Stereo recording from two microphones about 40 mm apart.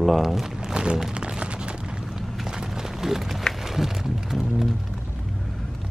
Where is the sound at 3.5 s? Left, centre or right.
Centre.